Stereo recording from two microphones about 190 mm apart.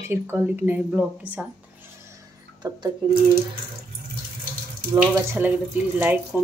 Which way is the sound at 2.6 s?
25° right (ahead or behind).